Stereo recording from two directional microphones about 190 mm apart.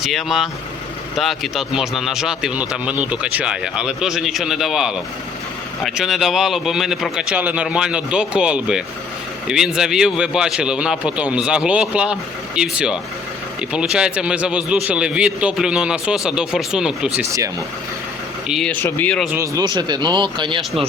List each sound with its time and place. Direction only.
0.0 s a man's voice: centre (ahead or behind)
17.2 s speech: 15° right (ahead or behind)
18.4 s speech: centre (ahead or behind)
19.3 s speech: 15° right (ahead or behind)